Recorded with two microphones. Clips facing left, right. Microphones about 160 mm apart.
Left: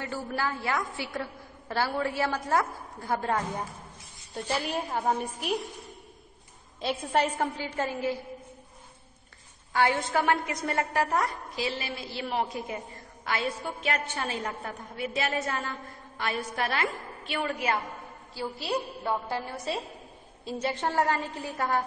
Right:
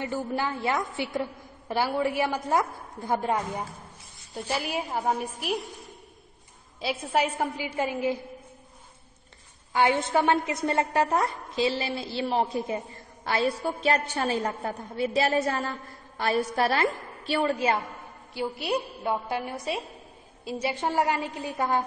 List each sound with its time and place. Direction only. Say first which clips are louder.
0.0 s a woman's voice: right 3 dB; 20° right (ahead or behind)
4.3 s a woman's voice: even; centre (ahead or behind)
9.7 s a woman's voice: right 2 dB; 20° right (ahead or behind)
18.3 s a woman's voice: right 3 dB; 15° right (ahead or behind)